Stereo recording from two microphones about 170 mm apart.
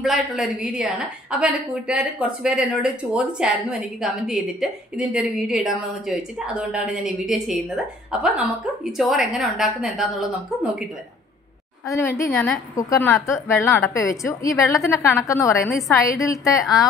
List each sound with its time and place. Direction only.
0.0 s a woman's voice: centre (ahead or behind)
11.8 s a woman's voice: 20° left (ahead or behind)